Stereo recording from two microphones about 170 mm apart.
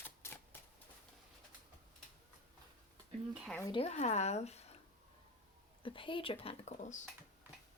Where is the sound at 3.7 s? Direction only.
35° left (ahead or behind).